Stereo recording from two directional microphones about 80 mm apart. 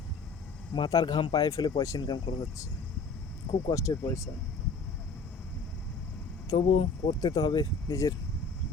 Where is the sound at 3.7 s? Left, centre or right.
Left.